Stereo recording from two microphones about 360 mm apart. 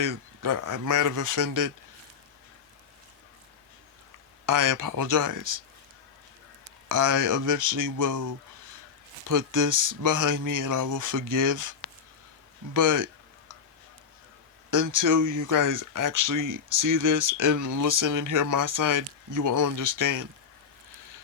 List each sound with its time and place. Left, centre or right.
0.0 s speech: right
4.4 s speech: right
6.8 s speech: right
12.7 s speech: right
14.7 s speech: right